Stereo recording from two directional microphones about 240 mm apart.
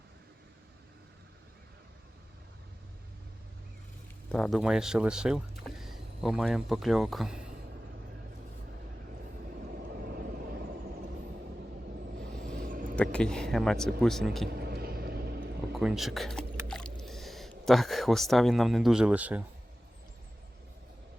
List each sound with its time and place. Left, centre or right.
4.3 s speech: centre
10.0 s vehicle: right
12.5 s a sound: right
13.0 s speech: centre
14.5 s vehicle: right
15.8 s speech: centre
16.6 s squish: centre
17.0 s speech: centre